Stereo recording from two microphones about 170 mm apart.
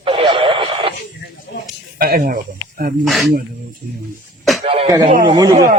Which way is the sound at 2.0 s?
60° right (ahead or behind).